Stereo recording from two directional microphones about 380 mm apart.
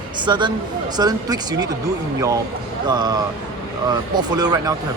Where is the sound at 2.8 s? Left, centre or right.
Centre.